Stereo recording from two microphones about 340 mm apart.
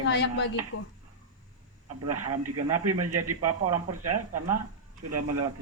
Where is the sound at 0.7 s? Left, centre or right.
Left.